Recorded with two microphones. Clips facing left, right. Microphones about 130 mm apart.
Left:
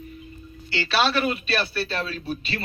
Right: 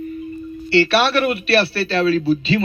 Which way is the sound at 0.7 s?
65° right (ahead or behind).